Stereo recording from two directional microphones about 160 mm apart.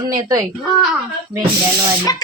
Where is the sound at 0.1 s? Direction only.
25° right (ahead or behind).